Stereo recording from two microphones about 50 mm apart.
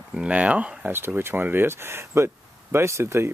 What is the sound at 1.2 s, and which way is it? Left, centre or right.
Speech, right.